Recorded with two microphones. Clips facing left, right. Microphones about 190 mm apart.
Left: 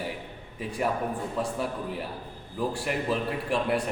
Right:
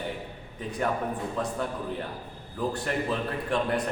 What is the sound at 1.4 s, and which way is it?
A man's voice, 5° left (ahead or behind).